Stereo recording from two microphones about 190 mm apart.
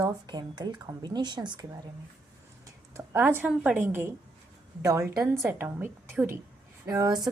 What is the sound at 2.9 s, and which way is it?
A woman's voice, 10° right (ahead or behind).